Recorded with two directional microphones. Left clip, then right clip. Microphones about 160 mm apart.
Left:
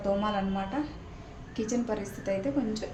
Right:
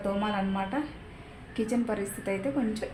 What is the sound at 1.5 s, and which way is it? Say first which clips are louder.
Speech: right 1 dB; 35° right (ahead or behind).